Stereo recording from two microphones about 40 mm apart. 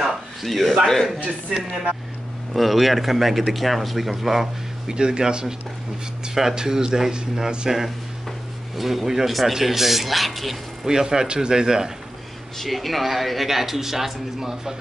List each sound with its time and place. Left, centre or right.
0.0 s a sound: centre
1.2 s speech: right
2.5 s speech: centre
4.9 s speech: right
8.7 s speech: centre
10.9 s speech: centre
12.6 s speech: centre